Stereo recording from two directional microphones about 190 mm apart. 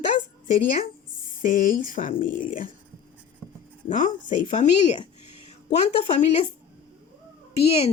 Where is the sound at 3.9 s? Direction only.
40° left (ahead or behind).